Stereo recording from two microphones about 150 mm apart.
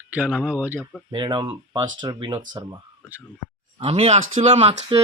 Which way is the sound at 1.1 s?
30° right (ahead or behind).